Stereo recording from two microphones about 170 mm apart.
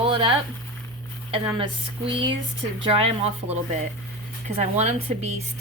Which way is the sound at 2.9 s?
35° right (ahead or behind).